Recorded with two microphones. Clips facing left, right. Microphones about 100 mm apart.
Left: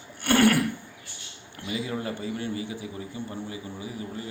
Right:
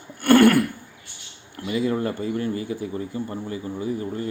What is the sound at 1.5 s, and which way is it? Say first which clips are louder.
A man's voice: right 8 dB; 45° right (ahead or behind).